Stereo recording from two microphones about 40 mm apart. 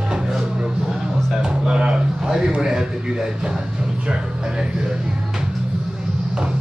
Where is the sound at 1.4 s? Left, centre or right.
Centre.